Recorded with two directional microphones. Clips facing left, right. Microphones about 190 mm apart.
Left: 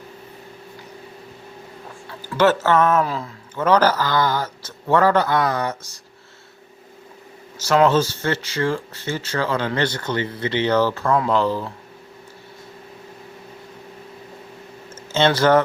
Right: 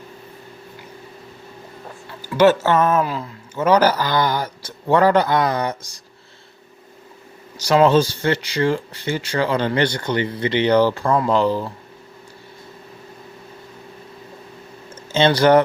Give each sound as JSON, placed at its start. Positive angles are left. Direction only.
{"t": 2.4, "sound": "speech", "side_deg": -10}
{"t": 7.6, "sound": "speech", "side_deg": -15}
{"t": 14.9, "sound": "speech", "side_deg": -15}